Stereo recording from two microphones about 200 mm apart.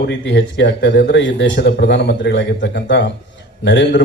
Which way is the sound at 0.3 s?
60° left (ahead or behind).